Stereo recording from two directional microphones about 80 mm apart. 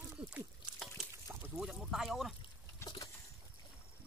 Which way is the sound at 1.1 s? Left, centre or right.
Right.